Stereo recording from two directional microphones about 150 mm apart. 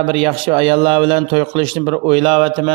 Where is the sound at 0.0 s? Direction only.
40° right (ahead or behind).